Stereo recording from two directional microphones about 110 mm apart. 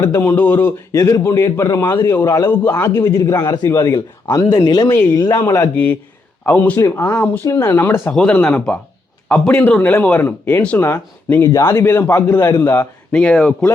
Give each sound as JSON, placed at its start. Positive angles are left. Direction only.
{"t": 0.0, "sound": "a man's voice", "side_deg": 20}
{"t": 0.9, "sound": "a man's voice", "side_deg": 30}
{"t": 5.7, "sound": "a man's voice", "side_deg": 15}
{"t": 8.1, "sound": "a man's voice", "side_deg": 5}
{"t": 13.1, "sound": "speech", "side_deg": 10}